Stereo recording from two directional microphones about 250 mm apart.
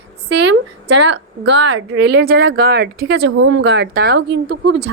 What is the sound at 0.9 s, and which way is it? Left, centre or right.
Speech, right.